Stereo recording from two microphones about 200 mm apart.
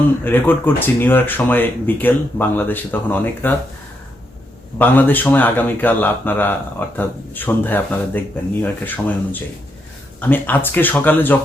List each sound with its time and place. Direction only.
0.3 s speech: 10° left (ahead or behind)
4.8 s speech: 10° left (ahead or behind)